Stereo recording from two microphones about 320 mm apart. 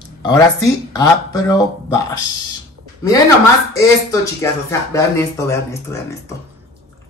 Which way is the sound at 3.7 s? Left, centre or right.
Centre.